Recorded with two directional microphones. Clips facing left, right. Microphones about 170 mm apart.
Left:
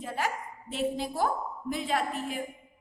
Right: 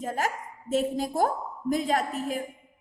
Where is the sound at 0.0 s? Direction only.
45° right (ahead or behind).